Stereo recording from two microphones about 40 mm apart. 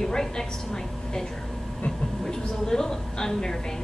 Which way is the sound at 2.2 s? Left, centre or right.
Centre.